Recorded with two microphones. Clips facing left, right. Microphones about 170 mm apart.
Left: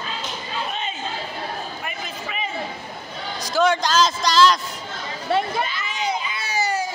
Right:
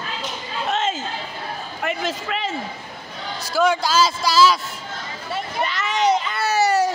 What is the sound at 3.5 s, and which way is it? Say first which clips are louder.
A man's voice: even; 5° right (ahead or behind).